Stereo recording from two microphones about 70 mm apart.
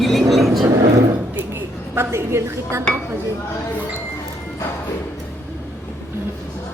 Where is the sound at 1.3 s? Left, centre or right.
Right.